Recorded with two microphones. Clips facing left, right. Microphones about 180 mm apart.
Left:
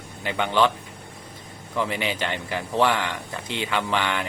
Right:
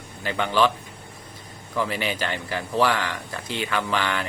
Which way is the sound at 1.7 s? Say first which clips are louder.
Even; 20° left (ahead or behind).